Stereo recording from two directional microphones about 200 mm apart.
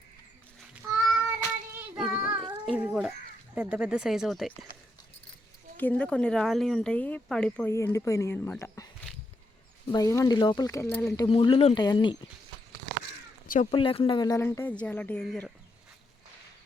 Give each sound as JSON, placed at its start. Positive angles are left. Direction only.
{"t": 0.8, "sound": "cat", "side_deg": -10}
{"t": 2.0, "sound": "child singing", "side_deg": -5}
{"t": 2.6, "sound": "a sound", "side_deg": -5}
{"t": 3.5, "sound": "speech", "side_deg": -5}
{"t": 5.7, "sound": "speech", "side_deg": 10}
{"t": 9.9, "sound": "speech", "side_deg": 15}
{"t": 11.3, "sound": "speech", "side_deg": 30}
{"t": 13.7, "sound": "speech", "side_deg": 25}